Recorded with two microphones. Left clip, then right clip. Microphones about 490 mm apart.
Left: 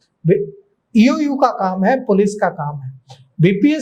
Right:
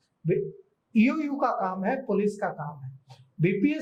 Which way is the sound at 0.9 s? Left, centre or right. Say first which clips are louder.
Left 11 dB; left.